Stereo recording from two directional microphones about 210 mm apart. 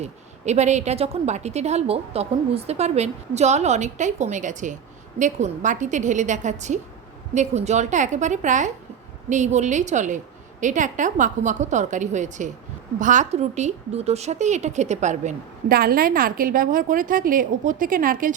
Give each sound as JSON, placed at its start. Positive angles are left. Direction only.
{"t": 0.0, "sound": "a woman's voice", "side_deg": -30}